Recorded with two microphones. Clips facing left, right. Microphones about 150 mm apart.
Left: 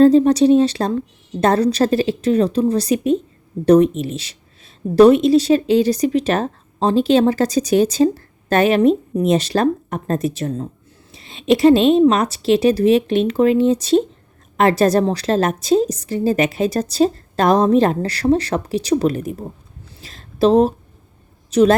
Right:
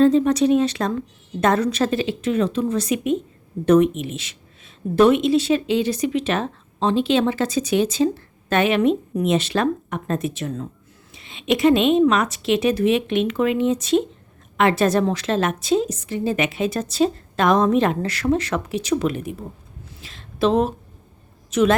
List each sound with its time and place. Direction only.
0.0 s speech: 35° left (ahead or behind)
20.0 s a sound: 40° left (ahead or behind)
21.5 s a woman's voice: 35° left (ahead or behind)